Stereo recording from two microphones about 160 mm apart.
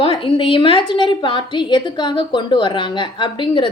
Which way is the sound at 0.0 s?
35° left (ahead or behind).